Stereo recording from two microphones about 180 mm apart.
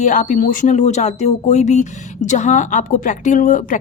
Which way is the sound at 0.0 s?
45° left (ahead or behind).